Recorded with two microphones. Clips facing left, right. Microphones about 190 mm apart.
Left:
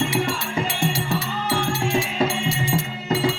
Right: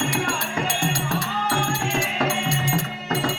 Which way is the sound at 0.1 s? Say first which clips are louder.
Left 2 dB; 5° left (ahead or behind).